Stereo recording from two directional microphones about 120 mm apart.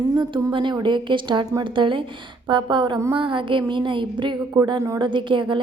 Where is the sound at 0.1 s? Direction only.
40° right (ahead or behind).